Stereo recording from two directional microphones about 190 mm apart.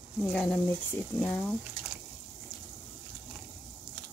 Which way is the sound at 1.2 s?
10° left (ahead or behind).